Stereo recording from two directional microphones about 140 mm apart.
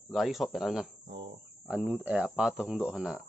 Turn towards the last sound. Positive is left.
turn(degrees=-5)  # may be behind; listen again after turning